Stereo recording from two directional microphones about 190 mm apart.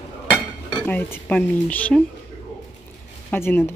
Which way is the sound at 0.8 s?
10° left (ahead or behind).